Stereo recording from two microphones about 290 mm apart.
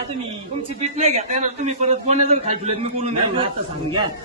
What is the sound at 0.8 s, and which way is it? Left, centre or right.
A man's voice, right.